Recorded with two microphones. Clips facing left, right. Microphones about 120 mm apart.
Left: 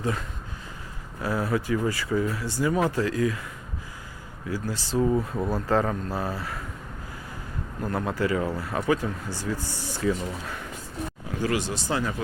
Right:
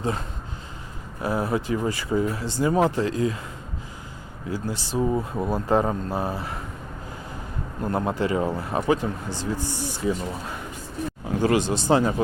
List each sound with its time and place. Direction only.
0.0 s speech: 30° right (ahead or behind)
4.4 s speech: 20° right (ahead or behind)
7.8 s speech: 25° right (ahead or behind)